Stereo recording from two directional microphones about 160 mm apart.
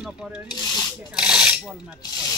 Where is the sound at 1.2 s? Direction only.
5° right (ahead or behind).